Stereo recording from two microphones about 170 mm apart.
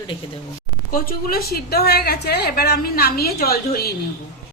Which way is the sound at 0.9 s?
60° left (ahead or behind).